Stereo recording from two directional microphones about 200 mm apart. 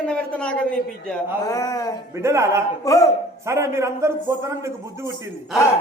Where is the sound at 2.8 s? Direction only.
15° left (ahead or behind).